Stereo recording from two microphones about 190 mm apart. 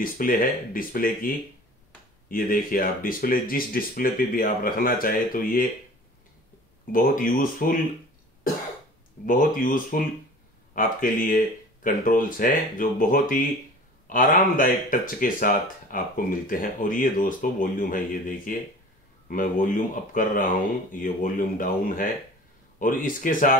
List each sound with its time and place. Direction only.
0.0 s speech: 45° left (ahead or behind)
6.9 s speech: 45° left (ahead or behind)
9.2 s speech: 45° left (ahead or behind)